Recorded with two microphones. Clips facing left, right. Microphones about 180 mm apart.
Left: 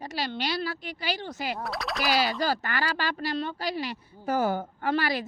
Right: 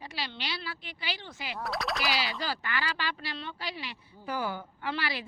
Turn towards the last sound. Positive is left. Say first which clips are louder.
# left 7 dB
turn(degrees=45)  # may be behind; listen again after turning